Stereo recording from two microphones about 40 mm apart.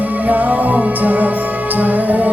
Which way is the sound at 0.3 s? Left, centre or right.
Right.